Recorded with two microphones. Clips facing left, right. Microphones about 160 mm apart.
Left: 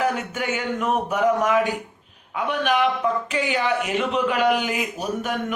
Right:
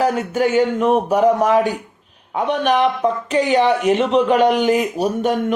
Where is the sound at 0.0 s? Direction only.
35° right (ahead or behind).